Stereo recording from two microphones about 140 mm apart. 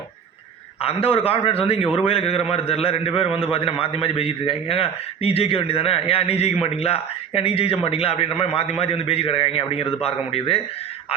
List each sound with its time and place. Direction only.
0.8 s a man's voice: 45° left (ahead or behind)